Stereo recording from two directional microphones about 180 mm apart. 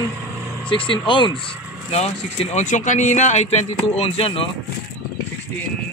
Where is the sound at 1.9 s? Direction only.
35° left (ahead or behind).